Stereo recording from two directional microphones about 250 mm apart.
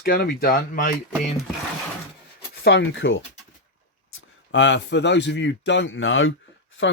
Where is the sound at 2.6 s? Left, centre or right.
Left.